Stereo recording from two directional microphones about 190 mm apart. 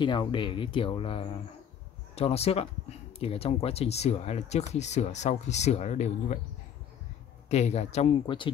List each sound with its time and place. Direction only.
0.0 s speech: 25° left (ahead or behind)
7.4 s speech: 35° left (ahead or behind)